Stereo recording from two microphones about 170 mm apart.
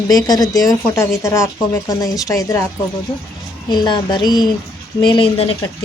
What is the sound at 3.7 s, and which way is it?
A woman's voice, 25° left (ahead or behind).